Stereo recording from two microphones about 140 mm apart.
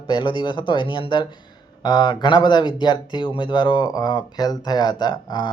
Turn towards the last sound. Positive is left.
turn(degrees=30)  # may be behind; listen again after turning